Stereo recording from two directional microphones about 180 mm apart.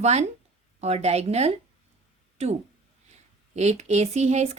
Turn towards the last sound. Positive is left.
turn(degrees=-35)  # may be behind; listen again after turning